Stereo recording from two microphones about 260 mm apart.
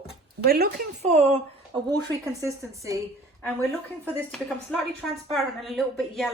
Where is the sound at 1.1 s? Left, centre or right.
Right.